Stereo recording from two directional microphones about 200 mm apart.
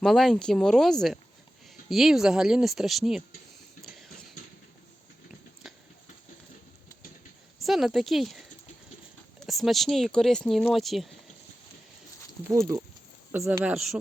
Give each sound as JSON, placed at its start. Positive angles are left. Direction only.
{"t": 0.0, "sound": "speech", "side_deg": 0}
{"t": 3.8, "sound": "a sound", "side_deg": 0}
{"t": 7.6, "sound": "speech", "side_deg": 0}
{"t": 9.5, "sound": "speech", "side_deg": 0}
{"t": 12.5, "sound": "speech", "side_deg": -15}